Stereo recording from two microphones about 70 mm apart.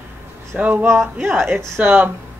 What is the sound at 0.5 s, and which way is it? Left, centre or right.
Speech, right.